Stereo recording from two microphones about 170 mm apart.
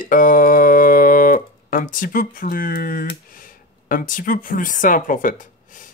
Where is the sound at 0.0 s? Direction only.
50° left (ahead or behind).